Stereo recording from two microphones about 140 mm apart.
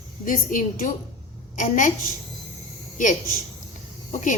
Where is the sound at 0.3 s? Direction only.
70° left (ahead or behind).